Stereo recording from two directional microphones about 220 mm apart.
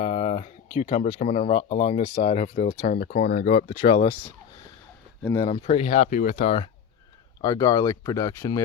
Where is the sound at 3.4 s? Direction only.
30° left (ahead or behind).